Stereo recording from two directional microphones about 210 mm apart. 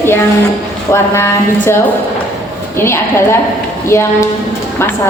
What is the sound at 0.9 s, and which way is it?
Speech, 10° left (ahead or behind).